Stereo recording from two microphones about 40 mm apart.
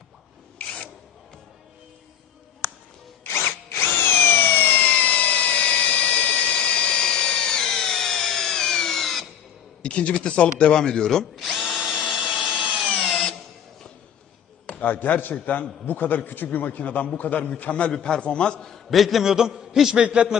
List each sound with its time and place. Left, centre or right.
0.6 s a sound: left
3.2 s drill: left
4.8 s a sound: left; by 9.3 s centre
9.8 s a man's voice: left
10.8 s a man's voice: centre
11.3 s drill: centre
13.0 s tools: centre
14.8 s a man's voice: left
18.6 s a man's voice: centre
19.2 s a man's voice: centre
20.0 s a man's voice: right